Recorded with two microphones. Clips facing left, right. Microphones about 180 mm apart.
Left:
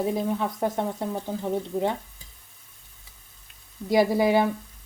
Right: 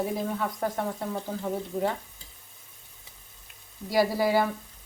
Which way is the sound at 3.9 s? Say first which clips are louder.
Left 4 dB; 20° left (ahead or behind).